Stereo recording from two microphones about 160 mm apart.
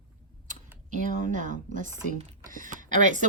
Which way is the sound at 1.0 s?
50° right (ahead or behind).